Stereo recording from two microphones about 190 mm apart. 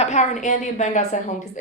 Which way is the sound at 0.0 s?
40° left (ahead or behind).